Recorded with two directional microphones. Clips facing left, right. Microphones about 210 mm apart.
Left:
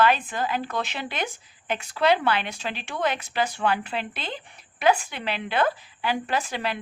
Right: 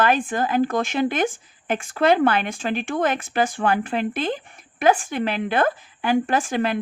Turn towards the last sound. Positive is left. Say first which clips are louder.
# right 6 dB
turn(degrees=-50)  # may be behind; listen again after turning